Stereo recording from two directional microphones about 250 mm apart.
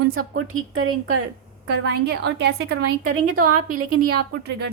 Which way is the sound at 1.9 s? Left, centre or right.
Right.